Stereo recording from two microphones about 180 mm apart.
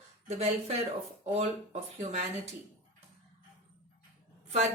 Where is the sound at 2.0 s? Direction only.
40° right (ahead or behind).